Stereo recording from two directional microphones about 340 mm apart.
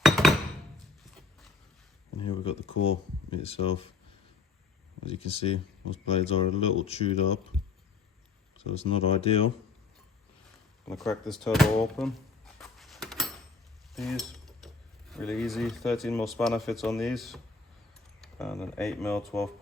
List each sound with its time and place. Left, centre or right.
0.0 s chink: centre
2.2 s a sound: centre
2.7 s speech: left
3.2 s speech: centre
5.0 s speech: centre
8.7 s speech: centre
10.8 s speech: centre
12.5 s a sound: centre
13.9 s speech: centre